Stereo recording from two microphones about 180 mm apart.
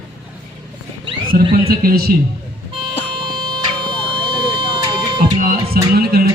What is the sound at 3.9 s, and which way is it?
Vehicle, 25° right (ahead or behind).